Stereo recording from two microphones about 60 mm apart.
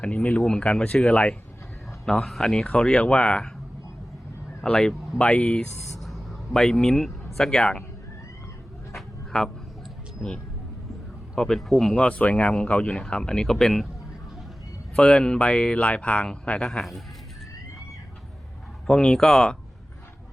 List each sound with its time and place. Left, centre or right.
0.0 s speech: left
2.0 s speech: centre
4.6 s speech: centre
6.0 s speech: centre
9.0 s a sound: centre
11.3 s speech: centre
11.9 s speech: left
14.9 s speech: centre
18.9 s speech: centre